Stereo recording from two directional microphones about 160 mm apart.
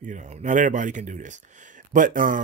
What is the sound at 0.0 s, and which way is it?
Speech, 50° right (ahead or behind).